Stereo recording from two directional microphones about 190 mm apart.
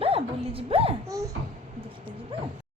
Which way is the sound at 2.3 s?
30° right (ahead or behind).